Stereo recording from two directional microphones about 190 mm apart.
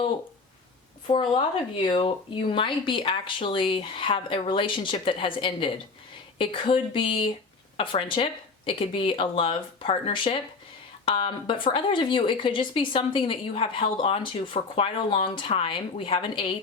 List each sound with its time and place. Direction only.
1.0 s speech: 25° left (ahead or behind)